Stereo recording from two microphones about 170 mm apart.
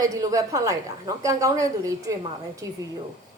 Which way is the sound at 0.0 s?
20° right (ahead or behind).